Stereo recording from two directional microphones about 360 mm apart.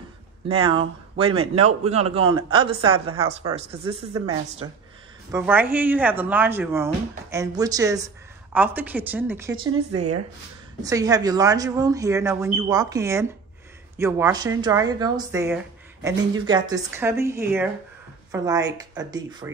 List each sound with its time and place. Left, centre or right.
0.5 s speech: centre
9.9 s speech: right
10.8 s speech: centre